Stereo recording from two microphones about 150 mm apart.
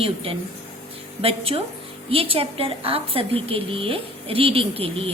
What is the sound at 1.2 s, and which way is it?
A woman's voice, 40° right (ahead or behind).